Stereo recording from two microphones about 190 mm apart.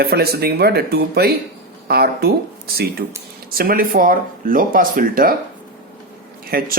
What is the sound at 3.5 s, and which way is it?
Speech, 50° right (ahead or behind).